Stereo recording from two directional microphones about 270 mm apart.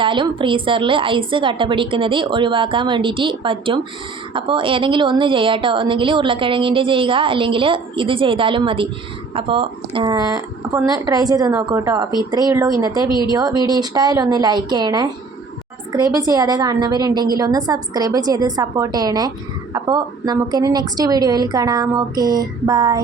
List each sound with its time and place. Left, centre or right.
0.0 s a woman's voice: centre